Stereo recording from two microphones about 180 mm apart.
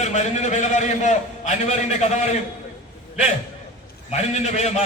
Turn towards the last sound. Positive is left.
turn(degrees=40)  # may be behind; listen again after turning